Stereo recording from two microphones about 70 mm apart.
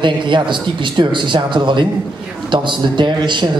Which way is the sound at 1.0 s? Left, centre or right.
Right.